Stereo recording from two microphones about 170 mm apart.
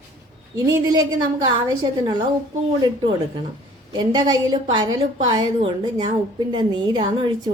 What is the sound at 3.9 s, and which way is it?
A woman's voice, 25° right (ahead or behind).